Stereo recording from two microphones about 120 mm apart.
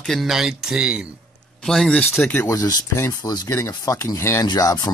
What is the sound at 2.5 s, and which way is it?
Speech, 35° left (ahead or behind).